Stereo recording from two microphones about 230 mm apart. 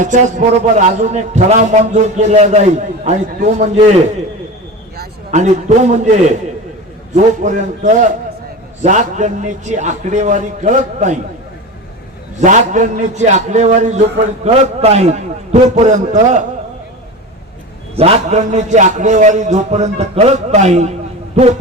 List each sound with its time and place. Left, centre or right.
0.0 s a man's voice: right
4.9 s a man's voice: right
12.4 s a man's voice: right
17.9 s a man's voice: right